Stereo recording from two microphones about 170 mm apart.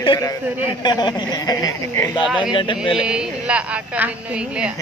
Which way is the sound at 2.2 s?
5° right (ahead or behind).